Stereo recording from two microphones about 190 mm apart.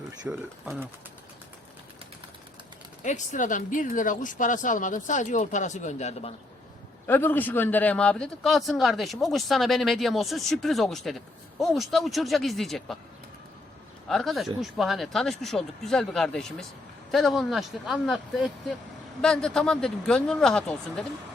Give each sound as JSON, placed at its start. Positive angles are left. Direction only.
{"t": 0.3, "sound": "speech", "side_deg": -10}
{"t": 3.0, "sound": "speech", "side_deg": 40}
{"t": 7.1, "sound": "speech", "side_deg": 10}
{"t": 14.1, "sound": "speech", "side_deg": 0}